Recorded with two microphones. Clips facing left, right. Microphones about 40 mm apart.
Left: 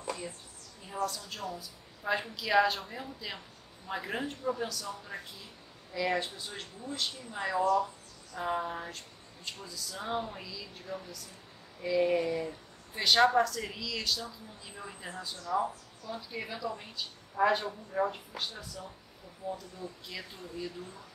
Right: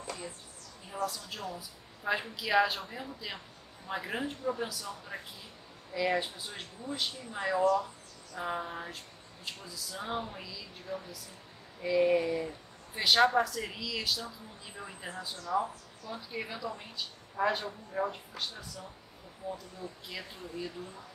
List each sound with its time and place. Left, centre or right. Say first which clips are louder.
1.0 s a woman's voice: even; centre